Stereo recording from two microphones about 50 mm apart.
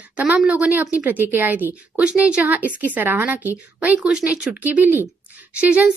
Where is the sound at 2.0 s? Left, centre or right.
Right.